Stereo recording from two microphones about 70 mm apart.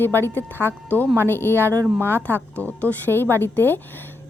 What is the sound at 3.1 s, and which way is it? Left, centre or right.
Speech, left.